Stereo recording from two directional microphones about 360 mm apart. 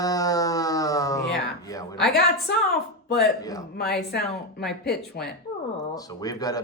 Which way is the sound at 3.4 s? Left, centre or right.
Centre.